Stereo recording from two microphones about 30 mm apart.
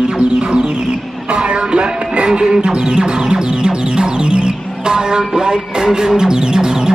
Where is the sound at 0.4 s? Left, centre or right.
Right.